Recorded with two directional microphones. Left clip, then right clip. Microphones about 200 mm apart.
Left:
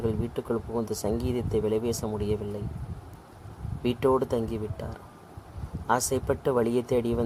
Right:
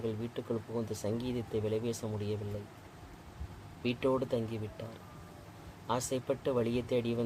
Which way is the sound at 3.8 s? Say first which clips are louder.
Left 7 dB; 35° left (ahead or behind).